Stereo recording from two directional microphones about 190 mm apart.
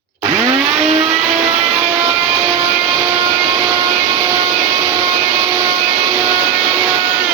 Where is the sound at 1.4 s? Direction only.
15° right (ahead or behind).